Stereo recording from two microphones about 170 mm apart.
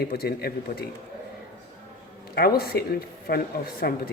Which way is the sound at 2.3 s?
65° left (ahead or behind).